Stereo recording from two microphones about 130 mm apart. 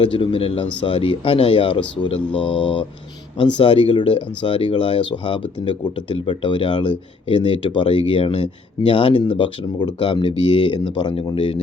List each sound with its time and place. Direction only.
0.0 s speech: 40° left (ahead or behind)